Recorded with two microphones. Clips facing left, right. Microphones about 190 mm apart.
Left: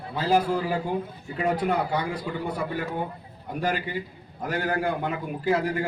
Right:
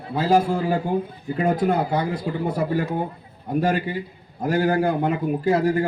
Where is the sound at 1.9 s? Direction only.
25° right (ahead or behind).